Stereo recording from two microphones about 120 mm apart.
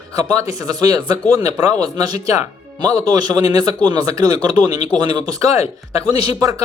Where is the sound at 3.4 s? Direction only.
35° right (ahead or behind).